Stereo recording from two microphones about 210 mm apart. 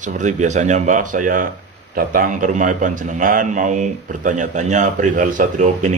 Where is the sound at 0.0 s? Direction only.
35° right (ahead or behind).